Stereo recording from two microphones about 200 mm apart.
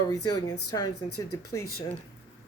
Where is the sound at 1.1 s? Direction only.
90° left.